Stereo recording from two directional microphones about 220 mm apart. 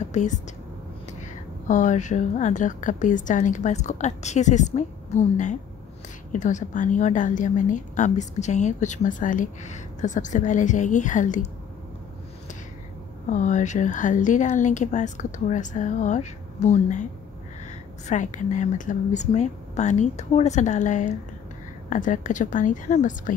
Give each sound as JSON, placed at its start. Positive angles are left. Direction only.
{"t": 0.2, "sound": "a woman's voice", "side_deg": 35}
{"t": 1.7, "sound": "a woman's voice", "side_deg": 35}
{"t": 13.3, "sound": "a woman's voice", "side_deg": 35}
{"t": 18.0, "sound": "a woman's voice", "side_deg": 35}